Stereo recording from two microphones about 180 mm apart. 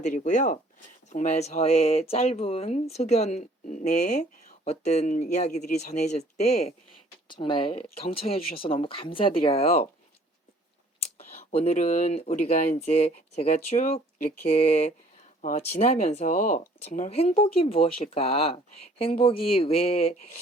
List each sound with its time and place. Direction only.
0.0 s speech: 40° left (ahead or behind)
11.5 s speech: 35° left (ahead or behind)